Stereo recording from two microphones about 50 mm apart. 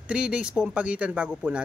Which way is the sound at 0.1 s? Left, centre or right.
Right.